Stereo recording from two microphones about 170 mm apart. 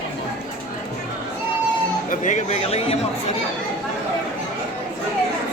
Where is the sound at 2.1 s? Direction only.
45° left (ahead or behind).